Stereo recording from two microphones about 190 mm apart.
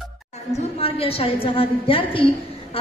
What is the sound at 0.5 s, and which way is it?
A woman's voice, 30° left (ahead or behind).